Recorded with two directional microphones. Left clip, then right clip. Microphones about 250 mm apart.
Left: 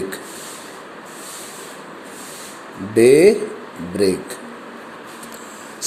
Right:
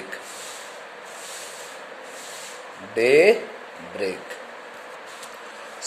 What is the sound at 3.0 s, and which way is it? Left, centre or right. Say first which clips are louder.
Speech: left 5 dB; centre.